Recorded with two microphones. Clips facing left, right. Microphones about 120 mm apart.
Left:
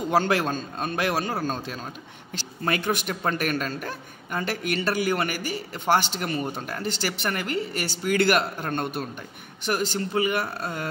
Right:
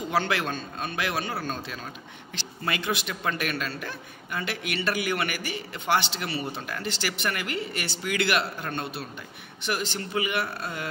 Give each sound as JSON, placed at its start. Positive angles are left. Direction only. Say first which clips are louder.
{"t": 0.1, "sound": "a man's voice", "louder": "left 4 dB", "side_deg": 40}